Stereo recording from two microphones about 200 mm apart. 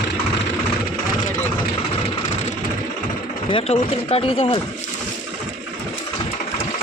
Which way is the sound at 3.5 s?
30° left (ahead or behind).